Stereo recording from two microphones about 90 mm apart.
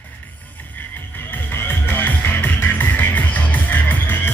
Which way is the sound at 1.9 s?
20° left (ahead or behind).